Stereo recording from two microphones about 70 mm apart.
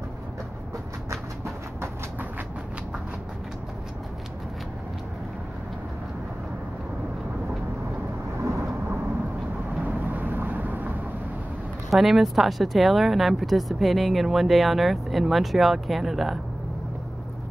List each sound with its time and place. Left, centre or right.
1.1 s a sound: right
8.4 s thunder: right
9.8 s vehicle: right
11.9 s speech: centre